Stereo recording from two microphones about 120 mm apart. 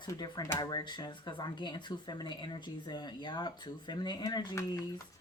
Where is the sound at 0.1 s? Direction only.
35° left (ahead or behind).